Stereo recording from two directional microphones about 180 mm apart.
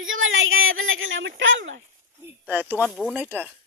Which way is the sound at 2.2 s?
10° right (ahead or behind).